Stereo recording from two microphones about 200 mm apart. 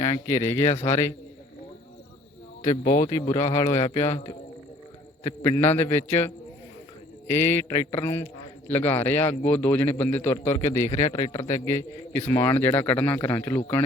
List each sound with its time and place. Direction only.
0.0 s speech: 15° left (ahead or behind)
2.6 s speech: 35° left (ahead or behind)
3.1 s speech: 25° left (ahead or behind)
3.5 s speech: 15° left (ahead or behind)
4.1 s speech: 30° left (ahead or behind)
5.2 s speech: 10° left (ahead or behind)
11.1 s speech: 30° left (ahead or behind)
11.4 s speech: 15° left (ahead or behind)